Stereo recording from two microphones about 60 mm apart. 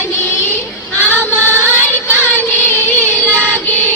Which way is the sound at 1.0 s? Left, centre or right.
Left.